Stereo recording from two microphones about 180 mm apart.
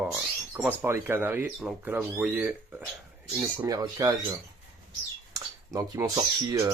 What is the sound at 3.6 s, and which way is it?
Speech, 20° right (ahead or behind).